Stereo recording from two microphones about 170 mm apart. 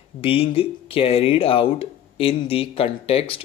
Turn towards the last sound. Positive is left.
turn(degrees=35)  # may be behind; listen again after turning